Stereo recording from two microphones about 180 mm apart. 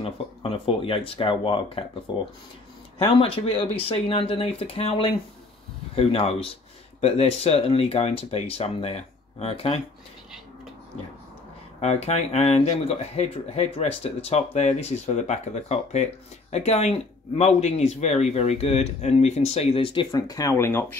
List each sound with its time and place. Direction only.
0.0 s speech: 30° left (ahead or behind)
3.0 s speech: 30° left (ahead or behind)
11.8 s speech: 35° left (ahead or behind); by 21.0 s 15° left (ahead or behind)